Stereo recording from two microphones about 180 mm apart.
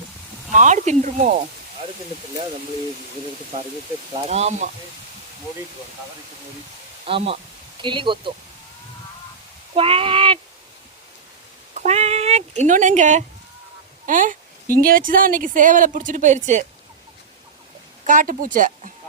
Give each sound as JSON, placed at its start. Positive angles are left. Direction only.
{"t": 0.5, "sound": "speech", "side_deg": -40}
{"t": 4.3, "sound": "speech", "side_deg": -40}
{"t": 7.0, "sound": "speech", "side_deg": -30}
{"t": 9.7, "sound": "speech", "side_deg": -30}
{"t": 11.7, "sound": "speech", "side_deg": -40}
{"t": 18.0, "sound": "speech", "side_deg": -45}